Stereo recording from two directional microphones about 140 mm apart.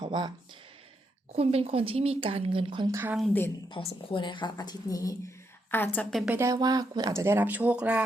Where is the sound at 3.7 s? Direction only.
40° left (ahead or behind).